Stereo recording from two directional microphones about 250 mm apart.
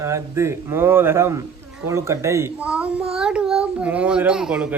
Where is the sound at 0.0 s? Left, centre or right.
Centre.